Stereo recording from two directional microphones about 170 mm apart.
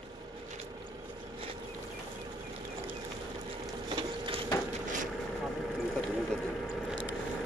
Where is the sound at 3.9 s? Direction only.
30° right (ahead or behind).